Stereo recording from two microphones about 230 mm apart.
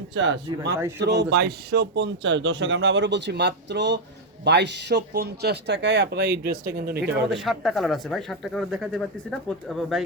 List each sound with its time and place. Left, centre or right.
0.1 s speech: right
7.3 s speech: centre